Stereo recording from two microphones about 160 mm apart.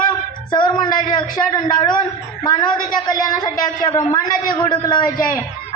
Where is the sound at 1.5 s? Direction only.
30° left (ahead or behind).